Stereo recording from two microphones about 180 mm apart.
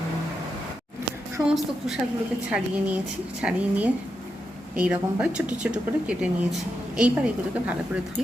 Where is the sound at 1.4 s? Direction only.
Centre (ahead or behind).